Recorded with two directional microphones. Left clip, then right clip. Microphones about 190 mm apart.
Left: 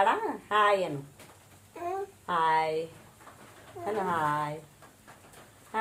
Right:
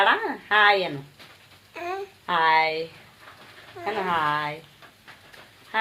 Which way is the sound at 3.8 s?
15° right (ahead or behind).